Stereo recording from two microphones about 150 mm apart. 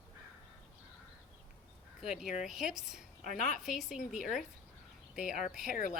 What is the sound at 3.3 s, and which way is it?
Speech, 55° left (ahead or behind).